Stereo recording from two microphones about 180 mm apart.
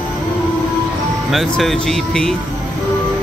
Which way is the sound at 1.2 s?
Centre (ahead or behind).